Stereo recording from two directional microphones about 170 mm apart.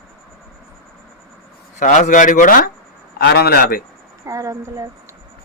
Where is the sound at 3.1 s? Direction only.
70° left (ahead or behind).